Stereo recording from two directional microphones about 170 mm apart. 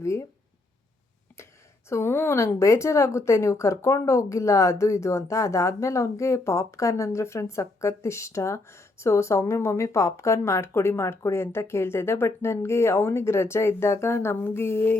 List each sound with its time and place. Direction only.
0.0 s speech: 15° left (ahead or behind)
1.4 s a sound: 15° left (ahead or behind)
1.9 s a woman's voice: 15° left (ahead or behind)